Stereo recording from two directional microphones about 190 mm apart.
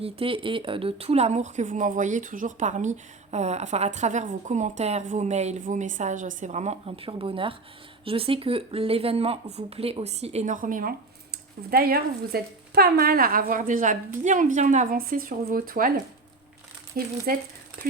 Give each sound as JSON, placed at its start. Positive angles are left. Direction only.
{"t": 0.0, "sound": "a woman's voice", "side_deg": -30}
{"t": 16.9, "sound": "a woman's voice", "side_deg": -50}